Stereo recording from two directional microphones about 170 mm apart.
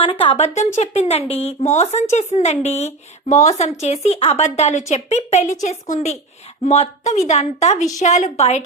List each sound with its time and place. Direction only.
0.0 s a woman's voice: 30° left (ahead or behind)